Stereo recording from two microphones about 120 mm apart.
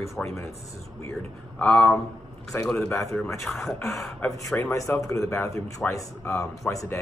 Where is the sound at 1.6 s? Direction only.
10° left (ahead or behind).